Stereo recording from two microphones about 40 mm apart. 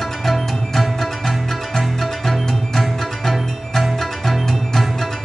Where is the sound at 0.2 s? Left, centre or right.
Centre.